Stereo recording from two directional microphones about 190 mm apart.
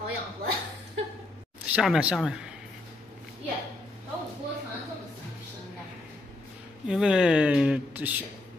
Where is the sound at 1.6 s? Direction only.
5° right (ahead or behind).